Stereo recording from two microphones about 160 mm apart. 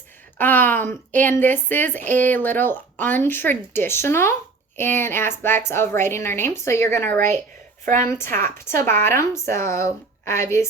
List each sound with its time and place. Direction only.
0.3 s speech: 10° left (ahead or behind)